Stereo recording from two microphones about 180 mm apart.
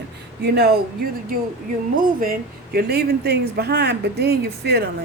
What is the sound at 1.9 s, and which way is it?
Speech, 50° right (ahead or behind).